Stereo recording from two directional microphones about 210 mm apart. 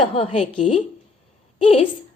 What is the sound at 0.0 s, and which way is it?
Speech, 30° left (ahead or behind).